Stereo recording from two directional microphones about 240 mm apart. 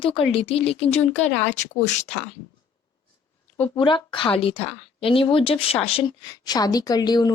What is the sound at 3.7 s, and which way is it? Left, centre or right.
Speech, left.